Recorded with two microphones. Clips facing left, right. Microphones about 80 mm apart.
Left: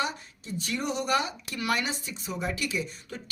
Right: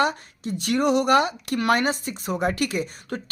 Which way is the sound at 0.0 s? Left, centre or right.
Right.